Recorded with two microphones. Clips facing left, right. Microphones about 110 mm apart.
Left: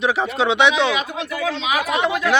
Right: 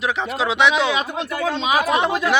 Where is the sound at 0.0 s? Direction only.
Centre (ahead or behind).